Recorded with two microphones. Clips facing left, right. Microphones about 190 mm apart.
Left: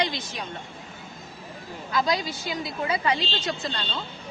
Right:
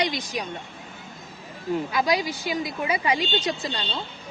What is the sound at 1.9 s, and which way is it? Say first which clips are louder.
A woman's voice: left 2 dB; 20° right (ahead or behind).